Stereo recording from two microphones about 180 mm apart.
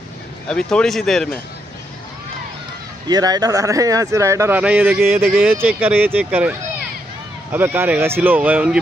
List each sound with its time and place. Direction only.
0.5 s speech: 5° left (ahead or behind)
3.1 s speech: 20° right (ahead or behind)
7.5 s speech: 10° right (ahead or behind)